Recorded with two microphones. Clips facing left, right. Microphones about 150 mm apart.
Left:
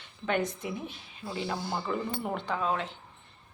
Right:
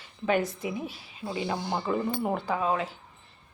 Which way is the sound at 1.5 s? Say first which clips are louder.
Right 3 dB; 15° right (ahead or behind).